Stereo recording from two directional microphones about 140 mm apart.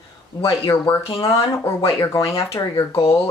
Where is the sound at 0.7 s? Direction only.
20° left (ahead or behind).